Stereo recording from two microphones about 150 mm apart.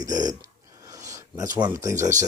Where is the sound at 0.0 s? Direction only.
25° right (ahead or behind).